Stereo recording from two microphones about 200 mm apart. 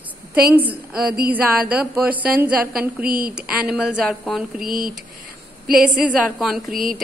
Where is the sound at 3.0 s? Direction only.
45° right (ahead or behind).